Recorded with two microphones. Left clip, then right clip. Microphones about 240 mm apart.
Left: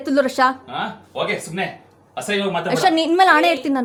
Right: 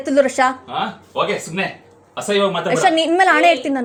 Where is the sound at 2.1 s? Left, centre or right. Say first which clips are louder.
Right 4 dB; centre.